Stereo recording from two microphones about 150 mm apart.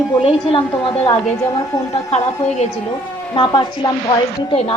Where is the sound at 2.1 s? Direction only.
50° left (ahead or behind).